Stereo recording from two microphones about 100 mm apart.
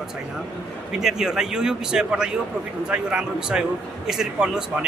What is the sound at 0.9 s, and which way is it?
A man's voice, 5° right (ahead or behind).